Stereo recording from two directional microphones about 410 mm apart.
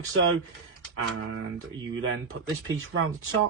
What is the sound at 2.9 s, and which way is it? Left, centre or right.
Speech, right.